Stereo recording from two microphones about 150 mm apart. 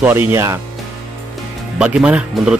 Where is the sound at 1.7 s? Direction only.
5° right (ahead or behind).